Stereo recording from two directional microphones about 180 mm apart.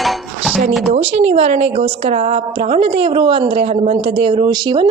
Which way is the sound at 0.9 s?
35° right (ahead or behind).